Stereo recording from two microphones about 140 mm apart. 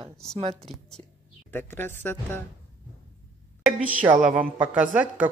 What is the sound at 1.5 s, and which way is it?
Speech, 15° left (ahead or behind).